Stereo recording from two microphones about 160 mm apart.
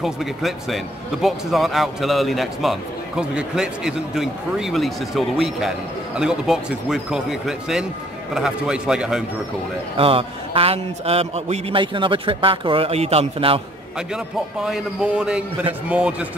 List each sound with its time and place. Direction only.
0.0 s a man's voice: centre (ahead or behind)
9.9 s a man's voice: 35° right (ahead or behind)
13.9 s a man's voice: 5° right (ahead or behind)